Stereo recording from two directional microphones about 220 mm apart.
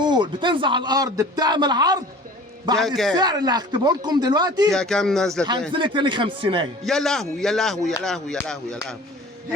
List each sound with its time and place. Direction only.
0.0 s a man's voice: 20° right (ahead or behind)
2.7 s a man's voice: centre (ahead or behind)
3.2 s a man's voice: 20° right (ahead or behind)
4.7 s a man's voice: centre (ahead or behind)
5.7 s a man's voice: 20° right (ahead or behind)
6.8 s a man's voice: centre (ahead or behind)